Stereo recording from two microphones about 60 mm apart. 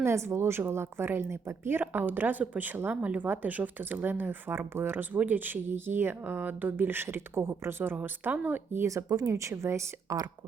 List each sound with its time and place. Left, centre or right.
0.0 s a woman's voice: right
1.8 s speech: right
8.9 s speech: right